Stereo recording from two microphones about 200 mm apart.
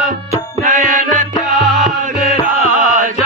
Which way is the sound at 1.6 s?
Centre (ahead or behind).